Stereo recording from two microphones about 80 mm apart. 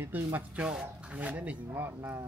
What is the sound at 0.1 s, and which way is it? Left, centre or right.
Speech, right.